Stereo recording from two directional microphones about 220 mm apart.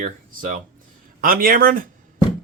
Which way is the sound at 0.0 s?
35° right (ahead or behind).